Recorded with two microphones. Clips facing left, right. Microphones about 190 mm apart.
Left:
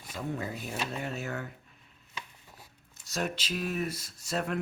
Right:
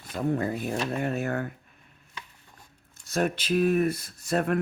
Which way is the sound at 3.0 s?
55° right (ahead or behind).